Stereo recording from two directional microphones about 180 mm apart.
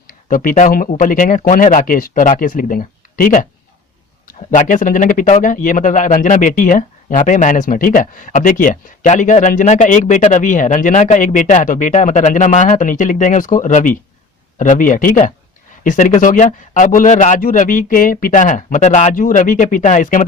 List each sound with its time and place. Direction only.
0.1 s speech: 50° left (ahead or behind)